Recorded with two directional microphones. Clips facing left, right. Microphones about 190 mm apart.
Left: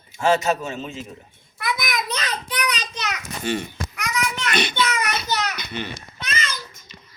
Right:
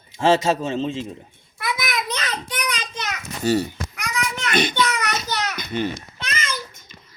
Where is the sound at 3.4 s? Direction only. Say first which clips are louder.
Right 5 dB; 40° right (ahead or behind).